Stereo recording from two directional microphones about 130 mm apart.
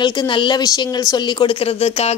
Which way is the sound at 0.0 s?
40° left (ahead or behind).